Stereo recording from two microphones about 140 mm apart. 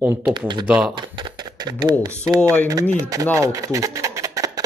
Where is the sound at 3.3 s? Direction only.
20° right (ahead or behind).